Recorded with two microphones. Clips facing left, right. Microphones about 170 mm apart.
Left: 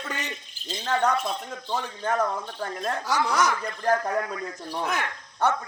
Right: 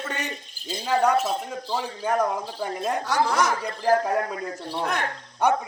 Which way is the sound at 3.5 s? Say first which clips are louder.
Right 3 dB; 35° right (ahead or behind).